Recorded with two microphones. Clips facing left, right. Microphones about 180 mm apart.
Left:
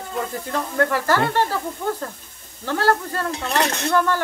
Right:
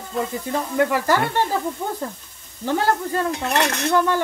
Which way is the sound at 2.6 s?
20° right (ahead or behind).